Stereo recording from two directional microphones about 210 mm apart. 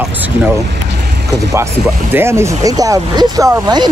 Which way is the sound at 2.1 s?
10° right (ahead or behind).